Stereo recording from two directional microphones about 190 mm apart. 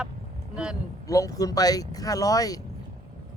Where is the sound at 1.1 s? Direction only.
20° left (ahead or behind).